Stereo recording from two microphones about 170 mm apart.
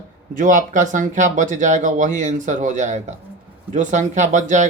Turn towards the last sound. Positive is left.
turn(degrees=-45)  # may be behind; listen again after turning